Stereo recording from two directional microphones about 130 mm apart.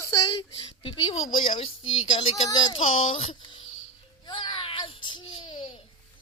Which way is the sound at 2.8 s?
55° left (ahead or behind).